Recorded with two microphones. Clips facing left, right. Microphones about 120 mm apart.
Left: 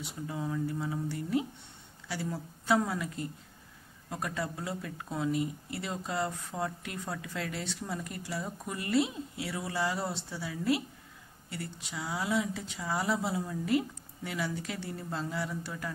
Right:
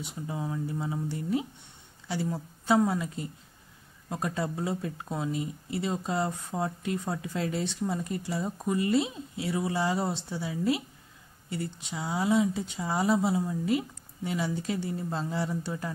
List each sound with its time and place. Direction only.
0.0 s speech: 20° right (ahead or behind)